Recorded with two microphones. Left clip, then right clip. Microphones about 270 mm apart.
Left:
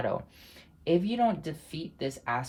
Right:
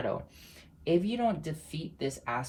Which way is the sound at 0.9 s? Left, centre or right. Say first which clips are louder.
Left 2 dB; left.